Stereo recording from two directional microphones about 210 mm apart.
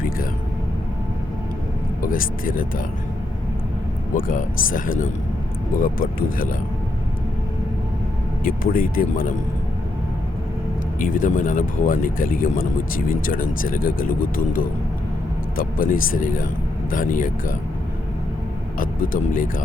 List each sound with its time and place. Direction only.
2.0 s speech: 40° left (ahead or behind)
4.1 s speech: 40° left (ahead or behind)
8.4 s speech: 45° left (ahead or behind)
11.0 s speech: 40° left (ahead or behind)
18.8 s speech: 40° left (ahead or behind)